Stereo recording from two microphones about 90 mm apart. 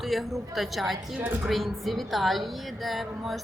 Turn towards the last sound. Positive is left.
turn(degrees=0)  # may be behind; listen again after turning